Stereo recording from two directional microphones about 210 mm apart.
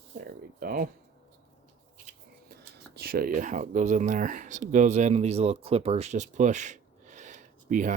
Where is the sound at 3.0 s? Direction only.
45° right (ahead or behind).